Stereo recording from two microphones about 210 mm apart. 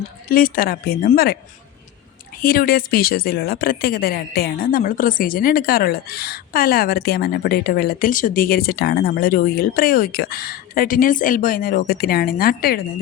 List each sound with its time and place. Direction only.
0.3 s speech: 45° left (ahead or behind)
2.4 s speech: 45° left (ahead or behind)